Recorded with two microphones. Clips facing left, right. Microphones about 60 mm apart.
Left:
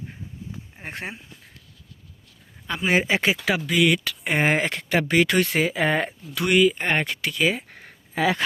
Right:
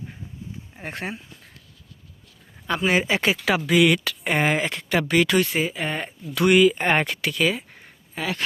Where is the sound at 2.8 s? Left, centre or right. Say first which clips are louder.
Left 1 dB; left.